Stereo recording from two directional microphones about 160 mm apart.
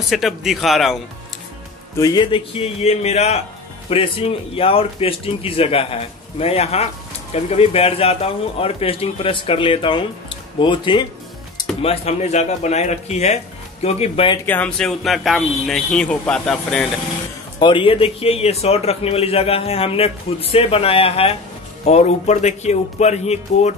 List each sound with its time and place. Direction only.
0.1 s speech: centre (ahead or behind)
2.0 s speech: 25° left (ahead or behind)
2.6 s speech: 40° left (ahead or behind)
14.4 s speech: 10° left (ahead or behind)
17.6 s speech: 30° left (ahead or behind)